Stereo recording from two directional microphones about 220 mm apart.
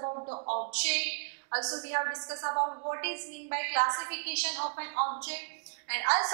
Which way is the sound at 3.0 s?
15° right (ahead or behind).